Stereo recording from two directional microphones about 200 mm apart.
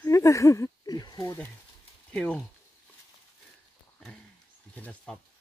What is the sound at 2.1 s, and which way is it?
Speech, 5° left (ahead or behind).